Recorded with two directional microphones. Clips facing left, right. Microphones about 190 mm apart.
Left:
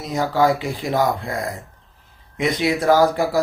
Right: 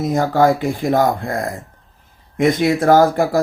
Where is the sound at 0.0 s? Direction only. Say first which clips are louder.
Right 4 dB; 50° right (ahead or behind).